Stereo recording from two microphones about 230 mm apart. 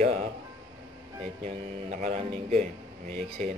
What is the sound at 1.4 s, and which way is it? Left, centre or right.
Speech, right.